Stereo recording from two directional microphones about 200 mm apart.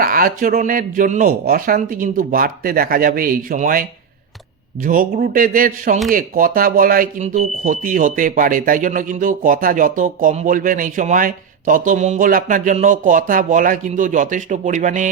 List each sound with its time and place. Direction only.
0.0 s speech: 45° right (ahead or behind)